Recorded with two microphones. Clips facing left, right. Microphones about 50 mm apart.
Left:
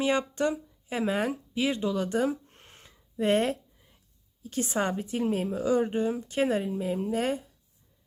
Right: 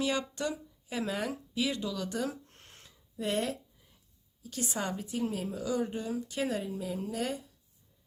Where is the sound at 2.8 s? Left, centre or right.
Left.